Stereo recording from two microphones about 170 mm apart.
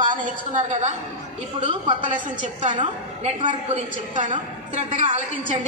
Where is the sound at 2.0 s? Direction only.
45° right (ahead or behind).